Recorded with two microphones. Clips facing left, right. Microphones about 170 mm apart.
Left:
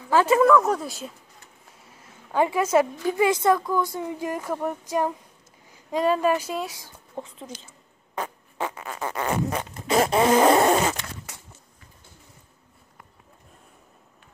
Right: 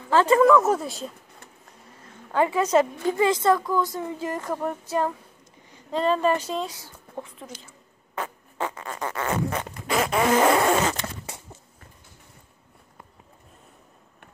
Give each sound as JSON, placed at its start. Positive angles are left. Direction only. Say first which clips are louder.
{"t": 0.1, "sound": "speech", "louder": "right 1 dB", "side_deg": 10}
{"t": 2.3, "sound": "a woman's voice", "louder": "even", "side_deg": 15}
{"t": 8.1, "sound": "fart", "louder": "left 1 dB", "side_deg": 15}
{"t": 9.8, "sound": "fart", "louder": "left 4 dB", "side_deg": 25}